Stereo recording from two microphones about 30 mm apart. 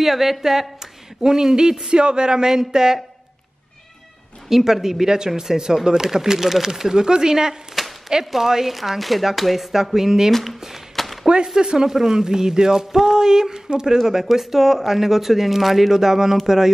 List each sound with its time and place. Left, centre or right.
0.0 s speech: centre
1.9 s speech: right
2.4 s speech: centre
4.5 s speech: centre
7.8 s chopping: centre
8.3 s speech: centre
8.7 s speech: centre
11.0 s a sound: centre
11.6 s speech: right
13.9 s speech: centre
15.9 s speech: centre